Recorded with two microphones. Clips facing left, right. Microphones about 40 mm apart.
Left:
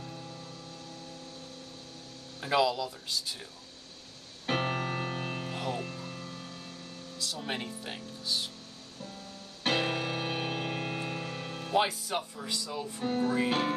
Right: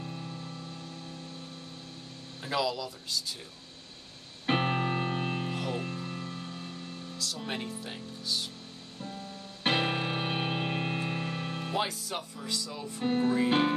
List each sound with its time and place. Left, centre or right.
0.0 s music: right
2.4 s speech: centre
4.5 s music: centre
7.4 s speech: centre
9.0 s music: right
11.7 s speech: centre
13.0 s music: right